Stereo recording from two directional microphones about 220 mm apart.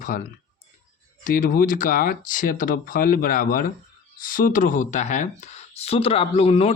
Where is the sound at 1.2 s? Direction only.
40° left (ahead or behind).